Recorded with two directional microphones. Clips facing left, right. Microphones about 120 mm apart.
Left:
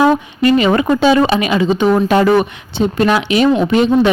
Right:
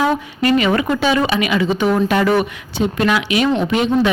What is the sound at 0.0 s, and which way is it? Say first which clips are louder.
Speech: left 5 dB; 25° left (ahead or behind).